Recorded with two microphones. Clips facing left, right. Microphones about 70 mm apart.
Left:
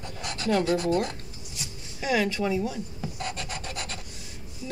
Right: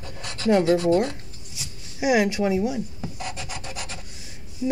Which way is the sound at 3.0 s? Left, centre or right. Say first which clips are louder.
Even; centre.